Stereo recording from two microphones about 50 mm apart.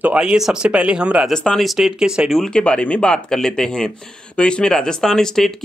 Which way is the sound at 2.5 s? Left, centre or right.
Centre.